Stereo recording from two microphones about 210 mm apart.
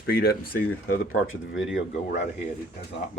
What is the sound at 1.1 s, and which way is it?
Speech, 75° left (ahead or behind).